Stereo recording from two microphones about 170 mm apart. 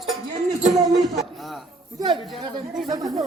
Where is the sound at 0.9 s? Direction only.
Centre (ahead or behind).